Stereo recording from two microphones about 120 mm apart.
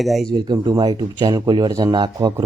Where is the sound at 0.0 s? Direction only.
Centre (ahead or behind).